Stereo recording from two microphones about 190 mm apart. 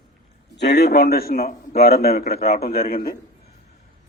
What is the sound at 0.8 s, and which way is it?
A man's voice, 60° left (ahead or behind).